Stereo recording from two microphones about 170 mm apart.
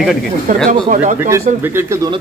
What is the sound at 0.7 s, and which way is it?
Speech, 50° right (ahead or behind).